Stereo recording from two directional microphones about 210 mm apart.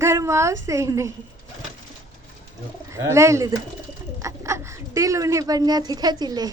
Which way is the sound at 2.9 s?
15° right (ahead or behind).